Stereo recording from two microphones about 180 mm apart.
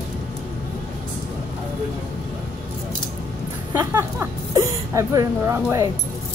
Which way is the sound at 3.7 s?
15° right (ahead or behind).